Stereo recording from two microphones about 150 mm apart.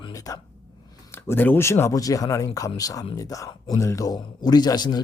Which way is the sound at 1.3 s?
15° left (ahead or behind).